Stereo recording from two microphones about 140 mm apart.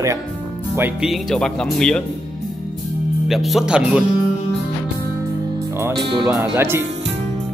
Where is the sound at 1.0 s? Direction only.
Centre (ahead or behind).